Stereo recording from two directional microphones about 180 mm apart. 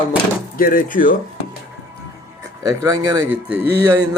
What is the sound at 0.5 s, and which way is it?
Speech, 50° left (ahead or behind).